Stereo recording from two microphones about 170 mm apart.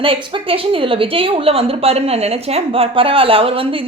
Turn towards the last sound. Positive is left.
turn(degrees=-30)  # may be behind; listen again after turning